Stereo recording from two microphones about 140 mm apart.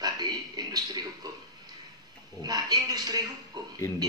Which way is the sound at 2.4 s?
30° right (ahead or behind).